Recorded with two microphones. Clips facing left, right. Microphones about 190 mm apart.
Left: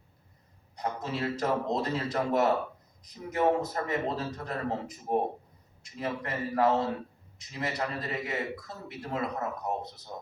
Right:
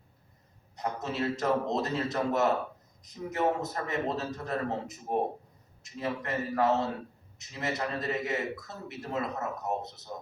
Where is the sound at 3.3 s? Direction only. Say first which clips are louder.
Left 3 dB; 25° right (ahead or behind).